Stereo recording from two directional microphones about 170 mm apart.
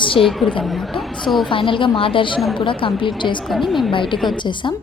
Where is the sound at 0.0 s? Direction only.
30° left (ahead or behind).